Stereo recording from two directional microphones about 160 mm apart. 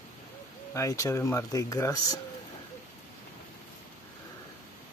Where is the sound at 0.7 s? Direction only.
20° left (ahead or behind).